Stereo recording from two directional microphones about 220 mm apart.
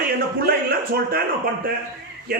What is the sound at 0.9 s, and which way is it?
A man's voice, 45° right (ahead or behind).